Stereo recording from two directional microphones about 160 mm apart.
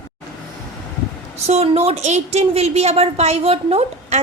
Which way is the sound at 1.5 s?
40° right (ahead or behind).